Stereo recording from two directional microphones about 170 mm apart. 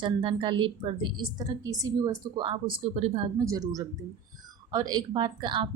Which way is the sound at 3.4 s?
20° right (ahead or behind).